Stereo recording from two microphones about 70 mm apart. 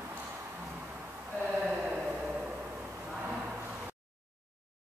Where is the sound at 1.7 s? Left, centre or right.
Centre.